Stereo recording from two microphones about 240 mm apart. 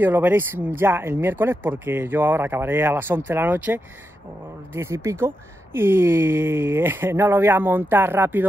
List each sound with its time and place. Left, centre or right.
0.0 s speech: centre